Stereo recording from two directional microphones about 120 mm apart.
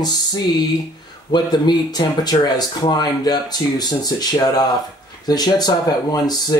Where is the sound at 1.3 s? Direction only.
35° left (ahead or behind).